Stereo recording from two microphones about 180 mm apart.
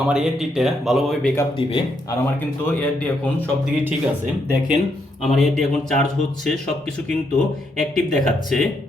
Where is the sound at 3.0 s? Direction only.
10° left (ahead or behind).